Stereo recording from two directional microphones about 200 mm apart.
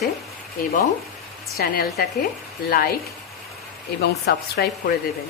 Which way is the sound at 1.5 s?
50° left (ahead or behind).